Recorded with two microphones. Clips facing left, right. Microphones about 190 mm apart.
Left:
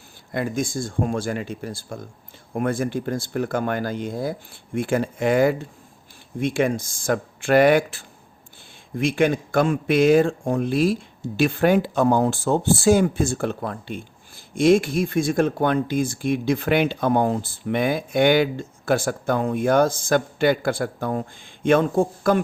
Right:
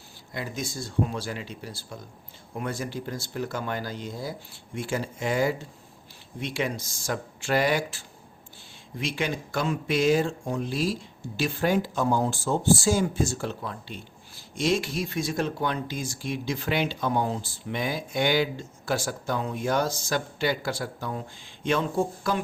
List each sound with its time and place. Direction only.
0.3 s speech: 50° left (ahead or behind)